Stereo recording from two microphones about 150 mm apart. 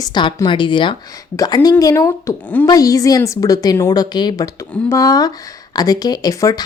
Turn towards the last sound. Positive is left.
turn(degrees=25)  # may be behind; listen again after turning